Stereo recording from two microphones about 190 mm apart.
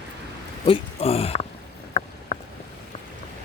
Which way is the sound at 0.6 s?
30° left (ahead or behind).